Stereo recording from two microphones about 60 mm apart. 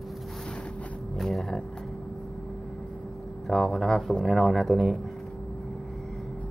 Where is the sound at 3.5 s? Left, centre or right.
Centre.